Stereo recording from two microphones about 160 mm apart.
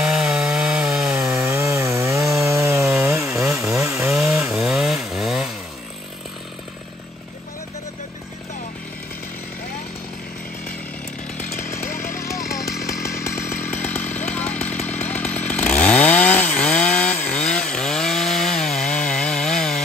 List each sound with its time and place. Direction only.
0.0 s wood: 5° right (ahead or behind)
1.4 s wood: 15° right (ahead or behind)
3.8 s chainsaw: 15° right (ahead or behind)
11.4 s chainsaw: 60° left (ahead or behind)
12.2 s chainsaw: 20° left (ahead or behind)